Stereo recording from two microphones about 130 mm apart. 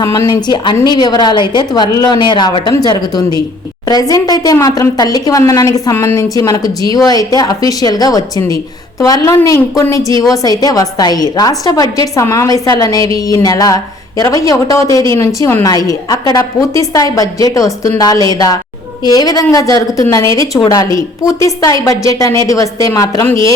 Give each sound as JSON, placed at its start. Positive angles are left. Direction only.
{"t": 0.0, "sound": "a woman's voice", "side_deg": 25}